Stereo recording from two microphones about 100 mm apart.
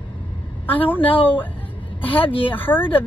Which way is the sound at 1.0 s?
65° left (ahead or behind).